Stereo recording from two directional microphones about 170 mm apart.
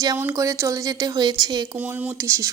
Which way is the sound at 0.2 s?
15° right (ahead or behind).